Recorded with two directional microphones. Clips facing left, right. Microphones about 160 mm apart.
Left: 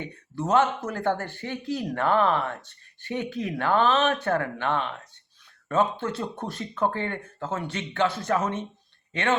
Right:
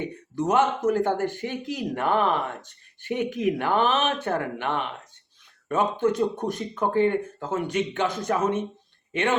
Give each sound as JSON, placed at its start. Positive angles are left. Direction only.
{"t": 0.0, "sound": "speech", "side_deg": -15}